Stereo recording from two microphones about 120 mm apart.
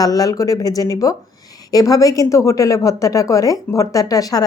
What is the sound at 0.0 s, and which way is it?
A woman's voice, 30° left (ahead or behind).